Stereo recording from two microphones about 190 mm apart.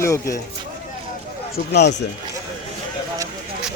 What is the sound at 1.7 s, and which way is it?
Speech, 65° left (ahead or behind).